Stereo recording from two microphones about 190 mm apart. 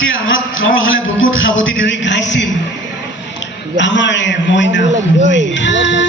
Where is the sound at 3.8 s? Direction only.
70° left (ahead or behind).